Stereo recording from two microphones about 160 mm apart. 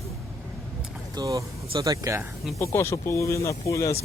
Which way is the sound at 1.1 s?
20° right (ahead or behind).